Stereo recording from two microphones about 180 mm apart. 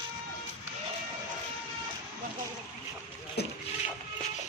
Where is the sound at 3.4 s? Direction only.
65° left (ahead or behind).